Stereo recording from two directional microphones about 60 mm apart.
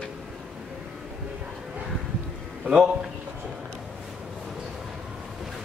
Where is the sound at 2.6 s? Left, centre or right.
Centre.